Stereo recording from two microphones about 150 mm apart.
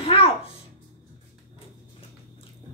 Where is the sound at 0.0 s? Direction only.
40° left (ahead or behind).